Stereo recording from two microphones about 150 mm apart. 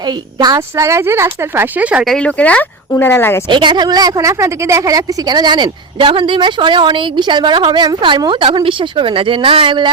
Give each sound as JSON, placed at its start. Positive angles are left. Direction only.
{"t": 0.0, "sound": "a woman's voice", "side_deg": -30}
{"t": 2.0, "sound": "speech", "side_deg": 5}
{"t": 3.5, "sound": "a woman's voice", "side_deg": -30}